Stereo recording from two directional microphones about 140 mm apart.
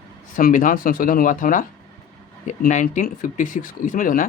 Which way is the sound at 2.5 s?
60° left (ahead or behind).